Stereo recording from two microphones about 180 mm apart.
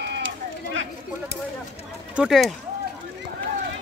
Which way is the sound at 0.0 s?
70° right (ahead or behind).